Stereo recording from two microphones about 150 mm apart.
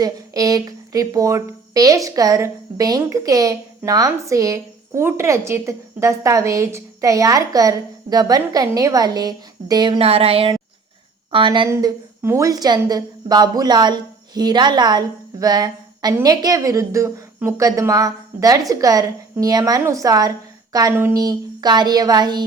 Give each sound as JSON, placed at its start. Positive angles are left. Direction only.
{"t": 0.0, "sound": "a woman's voice", "side_deg": -25}
{"t": 11.7, "sound": "a woman's voice", "side_deg": -20}